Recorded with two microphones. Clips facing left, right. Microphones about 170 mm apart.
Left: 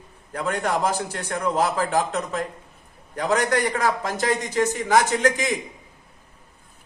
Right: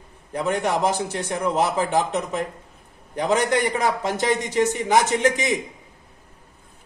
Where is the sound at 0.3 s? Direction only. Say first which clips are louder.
Right 2 dB; 20° right (ahead or behind).